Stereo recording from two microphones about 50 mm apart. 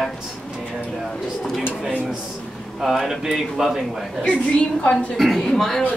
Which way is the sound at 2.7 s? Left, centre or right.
Centre.